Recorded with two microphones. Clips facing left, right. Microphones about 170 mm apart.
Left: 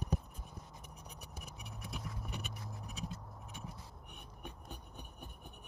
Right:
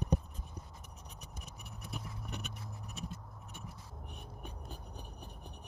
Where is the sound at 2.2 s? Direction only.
Centre (ahead or behind).